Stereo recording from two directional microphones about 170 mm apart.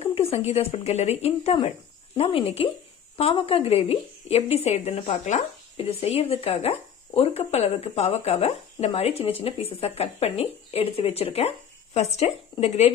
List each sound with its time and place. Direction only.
0.0 s a woman's voice: 35° left (ahead or behind)